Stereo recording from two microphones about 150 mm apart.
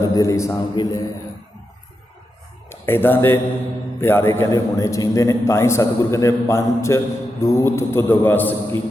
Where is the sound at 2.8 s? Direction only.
15° left (ahead or behind).